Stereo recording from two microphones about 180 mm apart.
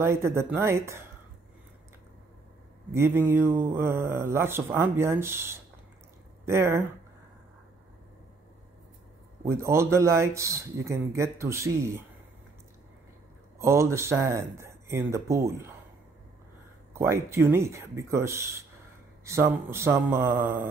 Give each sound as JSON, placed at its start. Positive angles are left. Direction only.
{"t": 0.0, "sound": "speech", "side_deg": -15}
{"t": 2.9, "sound": "speech", "side_deg": -15}
{"t": 9.4, "sound": "speech", "side_deg": -15}
{"t": 13.6, "sound": "speech", "side_deg": -15}
{"t": 16.9, "sound": "speech", "side_deg": -15}